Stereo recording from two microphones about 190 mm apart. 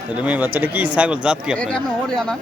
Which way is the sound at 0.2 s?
10° right (ahead or behind).